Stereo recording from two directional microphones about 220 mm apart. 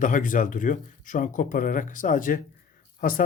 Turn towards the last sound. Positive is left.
turn(degrees=40)  # may be behind; listen again after turning